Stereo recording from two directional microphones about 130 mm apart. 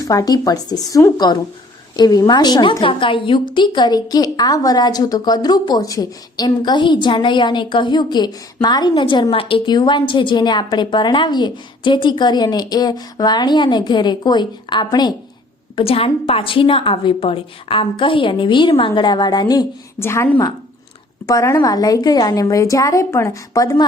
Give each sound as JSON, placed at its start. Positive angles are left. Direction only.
{"t": 0.0, "sound": "a woman's voice", "side_deg": 25}
{"t": 15.7, "sound": "a woman's voice", "side_deg": 45}
{"t": 20.0, "sound": "a woman's voice", "side_deg": 20}